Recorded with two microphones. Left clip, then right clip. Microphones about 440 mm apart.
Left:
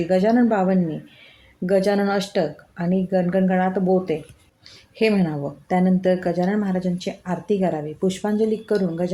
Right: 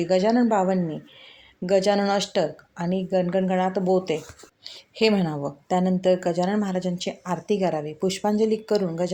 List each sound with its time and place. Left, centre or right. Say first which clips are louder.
0.1 s speech: left 2 dB; left